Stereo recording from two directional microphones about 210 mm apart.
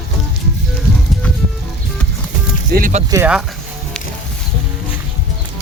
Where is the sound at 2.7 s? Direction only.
35° right (ahead or behind).